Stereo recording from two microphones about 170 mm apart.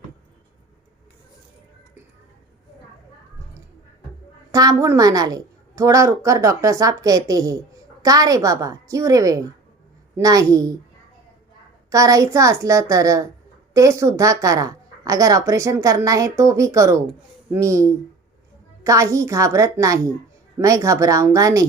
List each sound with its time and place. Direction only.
4.5 s a woman's voice: 20° right (ahead or behind)
11.9 s a woman's voice: 20° right (ahead or behind)